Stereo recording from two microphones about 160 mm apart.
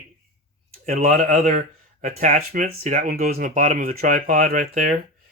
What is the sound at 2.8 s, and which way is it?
Speech, 50° right (ahead or behind).